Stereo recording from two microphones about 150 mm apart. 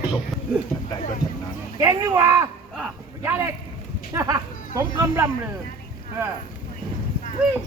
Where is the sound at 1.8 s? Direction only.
20° right (ahead or behind).